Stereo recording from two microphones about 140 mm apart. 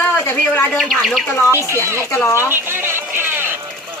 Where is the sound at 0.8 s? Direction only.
Centre (ahead or behind).